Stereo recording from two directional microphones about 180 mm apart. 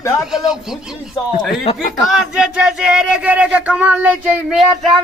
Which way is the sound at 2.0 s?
5° right (ahead or behind).